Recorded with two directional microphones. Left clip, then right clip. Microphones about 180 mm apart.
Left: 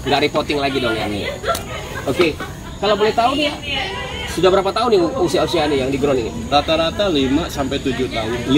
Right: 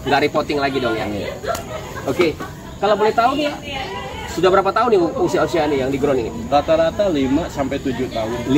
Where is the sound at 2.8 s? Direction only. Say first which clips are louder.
Even; 15° left (ahead or behind).